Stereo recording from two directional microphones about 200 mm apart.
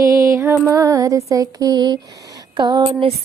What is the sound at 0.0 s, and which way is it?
Music, 15° right (ahead or behind).